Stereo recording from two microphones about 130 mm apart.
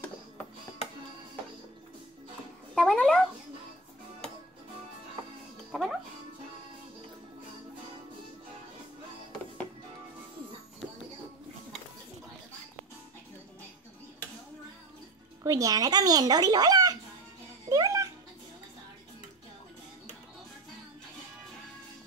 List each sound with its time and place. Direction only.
2.7 s speech: 5° left (ahead or behind)
5.7 s music: centre (ahead or behind)
15.4 s speech: 25° right (ahead or behind)
17.6 s a sound: 25° right (ahead or behind)